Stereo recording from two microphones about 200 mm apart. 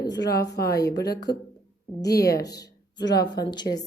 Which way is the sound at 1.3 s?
55° left (ahead or behind).